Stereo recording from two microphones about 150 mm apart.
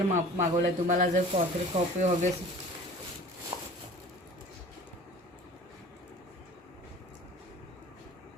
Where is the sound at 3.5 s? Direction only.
25° right (ahead or behind).